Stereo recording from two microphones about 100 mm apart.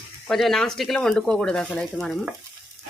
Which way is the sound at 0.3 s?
5° left (ahead or behind).